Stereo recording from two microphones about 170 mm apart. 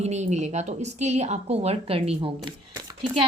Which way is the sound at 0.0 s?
40° right (ahead or behind).